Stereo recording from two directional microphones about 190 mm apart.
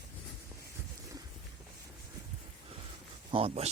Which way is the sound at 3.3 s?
30° right (ahead or behind).